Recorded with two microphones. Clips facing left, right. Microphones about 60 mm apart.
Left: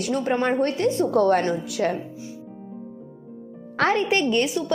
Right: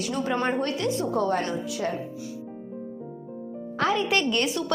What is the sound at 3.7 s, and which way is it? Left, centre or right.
Speech, left.